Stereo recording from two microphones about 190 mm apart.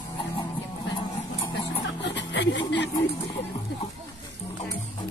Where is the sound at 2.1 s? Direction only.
65° left (ahead or behind).